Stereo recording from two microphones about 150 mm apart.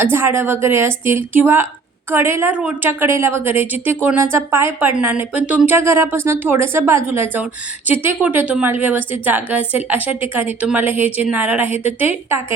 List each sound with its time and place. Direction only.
0.0 s a woman's voice: 15° right (ahead or behind)